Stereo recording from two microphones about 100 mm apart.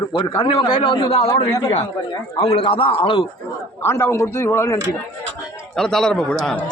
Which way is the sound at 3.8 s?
25° left (ahead or behind).